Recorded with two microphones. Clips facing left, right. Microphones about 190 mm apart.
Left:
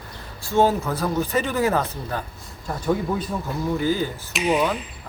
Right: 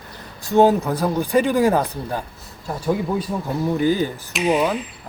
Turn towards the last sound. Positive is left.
turn(degrees=-15)  # may be behind; listen again after turning